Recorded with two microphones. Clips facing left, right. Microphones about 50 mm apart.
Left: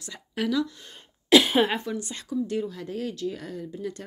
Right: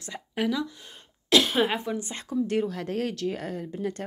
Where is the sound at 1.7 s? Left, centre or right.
Centre.